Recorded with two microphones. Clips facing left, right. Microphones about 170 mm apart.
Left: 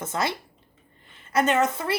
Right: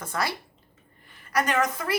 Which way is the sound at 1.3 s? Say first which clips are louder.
Left 3 dB; 25° left (ahead or behind).